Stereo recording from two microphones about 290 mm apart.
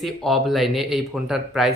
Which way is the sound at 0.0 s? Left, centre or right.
Centre.